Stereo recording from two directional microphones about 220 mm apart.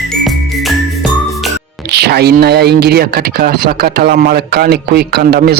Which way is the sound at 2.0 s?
45° right (ahead or behind).